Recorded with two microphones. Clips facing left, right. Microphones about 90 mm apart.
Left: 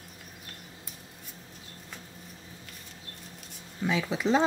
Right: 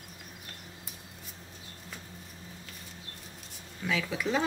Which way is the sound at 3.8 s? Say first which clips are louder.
Left 3 dB; 25° left (ahead or behind).